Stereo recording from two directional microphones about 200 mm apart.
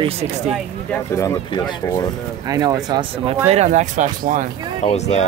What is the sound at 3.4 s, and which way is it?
Speech, 35° right (ahead or behind).